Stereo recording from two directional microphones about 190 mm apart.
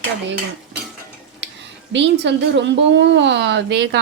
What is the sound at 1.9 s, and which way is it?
A woman's voice, 70° right (ahead or behind).